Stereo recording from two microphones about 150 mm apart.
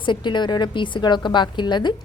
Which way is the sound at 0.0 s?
30° left (ahead or behind).